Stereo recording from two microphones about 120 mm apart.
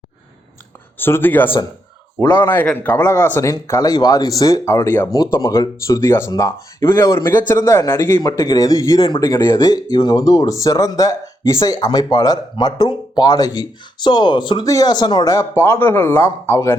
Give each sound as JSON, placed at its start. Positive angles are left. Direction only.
{"t": 0.9, "sound": "speech", "side_deg": 20}